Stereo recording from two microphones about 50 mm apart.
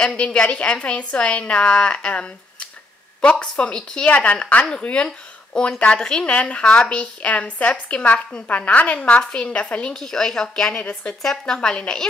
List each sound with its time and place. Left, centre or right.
0.0 s a woman's voice: centre
9.9 s speech: centre